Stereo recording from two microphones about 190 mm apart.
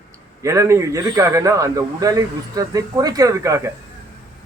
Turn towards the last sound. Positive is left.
turn(degrees=-15)  # may be behind; listen again after turning